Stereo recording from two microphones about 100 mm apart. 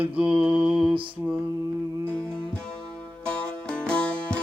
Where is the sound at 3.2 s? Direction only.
10° left (ahead or behind).